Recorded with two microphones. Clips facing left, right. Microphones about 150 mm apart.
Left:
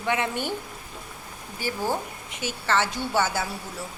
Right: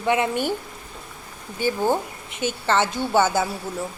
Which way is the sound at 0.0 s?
20° right (ahead or behind).